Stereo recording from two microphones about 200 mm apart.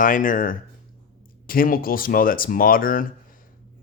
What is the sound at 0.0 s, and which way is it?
Speech, 40° left (ahead or behind).